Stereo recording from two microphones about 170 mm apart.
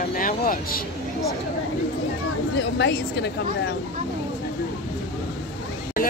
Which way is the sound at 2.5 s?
90° left.